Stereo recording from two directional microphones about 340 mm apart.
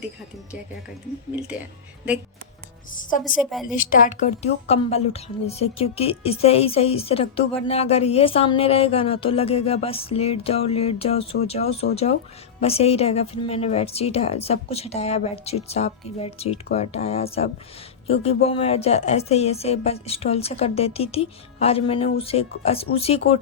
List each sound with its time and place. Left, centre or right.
3.4 s a woman's voice: centre
3.7 s a woman's voice: left